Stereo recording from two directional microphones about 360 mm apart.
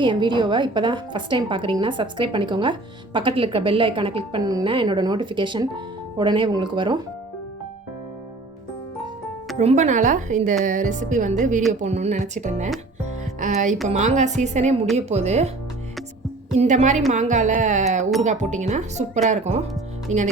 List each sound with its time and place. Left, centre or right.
0.0 s a woman's voice: centre
9.6 s a woman's voice: centre
16.6 s speech: centre